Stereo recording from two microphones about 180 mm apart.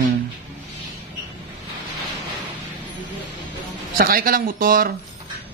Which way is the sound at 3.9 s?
55° right (ahead or behind).